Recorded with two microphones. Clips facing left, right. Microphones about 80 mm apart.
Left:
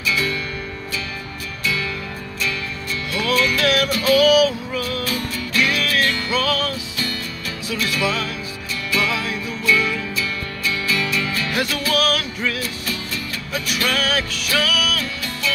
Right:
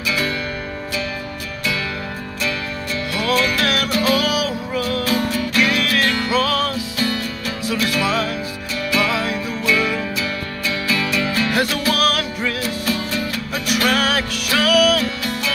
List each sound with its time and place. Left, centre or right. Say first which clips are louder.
0.0 s music: even; right
3.1 s music: even; right